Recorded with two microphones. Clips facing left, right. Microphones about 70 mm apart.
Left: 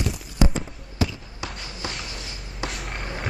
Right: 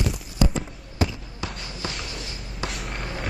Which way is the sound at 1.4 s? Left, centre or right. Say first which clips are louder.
Right 1 dB; centre.